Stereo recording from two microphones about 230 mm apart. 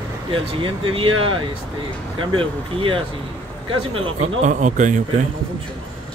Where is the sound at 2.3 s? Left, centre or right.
Right.